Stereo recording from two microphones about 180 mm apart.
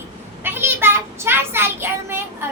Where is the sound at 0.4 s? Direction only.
10° right (ahead or behind).